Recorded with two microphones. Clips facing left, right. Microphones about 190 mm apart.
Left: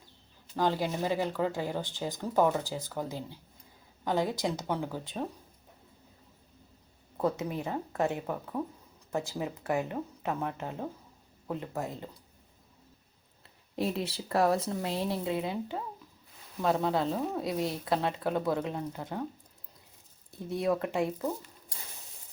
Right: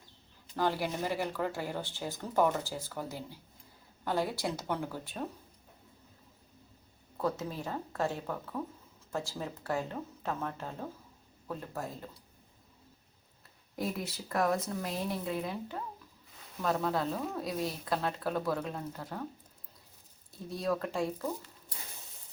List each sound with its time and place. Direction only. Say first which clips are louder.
0.8 s speech: left 3 dB; 15° left (ahead or behind)
7.2 s speech: left 3 dB; 20° left (ahead or behind)
13.7 s speech: left 4 dB; 25° left (ahead or behind)
20.5 s speech: left 4 dB; 20° left (ahead or behind)